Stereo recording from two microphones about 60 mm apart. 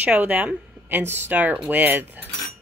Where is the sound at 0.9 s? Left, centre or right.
Right.